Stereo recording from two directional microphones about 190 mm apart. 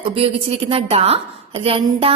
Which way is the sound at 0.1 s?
30° right (ahead or behind).